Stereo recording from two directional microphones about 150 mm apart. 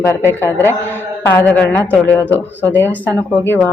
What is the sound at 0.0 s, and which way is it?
Speech, 15° left (ahead or behind).